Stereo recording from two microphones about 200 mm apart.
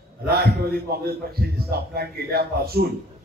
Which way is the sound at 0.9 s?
50° right (ahead or behind).